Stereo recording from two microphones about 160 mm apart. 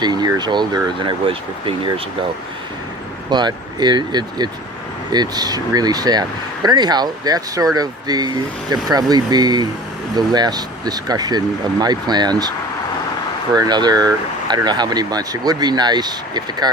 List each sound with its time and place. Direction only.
0.0 s speech: 25° right (ahead or behind)
3.2 s speech: 25° right (ahead or behind)